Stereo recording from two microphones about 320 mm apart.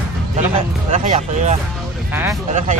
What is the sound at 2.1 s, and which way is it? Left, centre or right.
Speech, centre.